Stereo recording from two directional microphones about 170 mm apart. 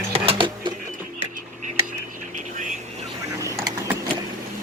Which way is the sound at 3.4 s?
15° right (ahead or behind).